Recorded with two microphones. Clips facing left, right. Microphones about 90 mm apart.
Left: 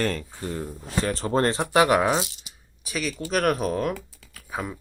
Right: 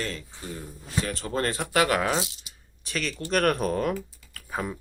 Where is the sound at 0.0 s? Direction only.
50° left (ahead or behind).